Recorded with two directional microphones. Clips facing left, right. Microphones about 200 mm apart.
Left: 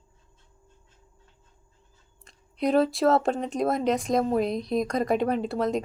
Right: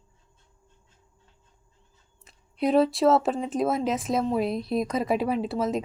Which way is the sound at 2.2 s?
5° right (ahead or behind).